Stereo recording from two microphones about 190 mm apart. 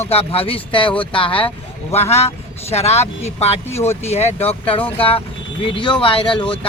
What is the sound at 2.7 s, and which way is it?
Speech, 35° left (ahead or behind).